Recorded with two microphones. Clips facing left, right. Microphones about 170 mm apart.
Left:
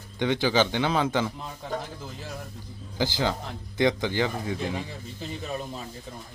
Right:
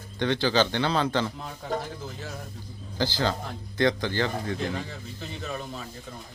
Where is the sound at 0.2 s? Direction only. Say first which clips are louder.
Even; 15° left (ahead or behind).